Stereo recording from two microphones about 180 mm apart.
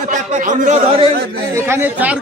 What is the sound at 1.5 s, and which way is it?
Speech, 15° right (ahead or behind).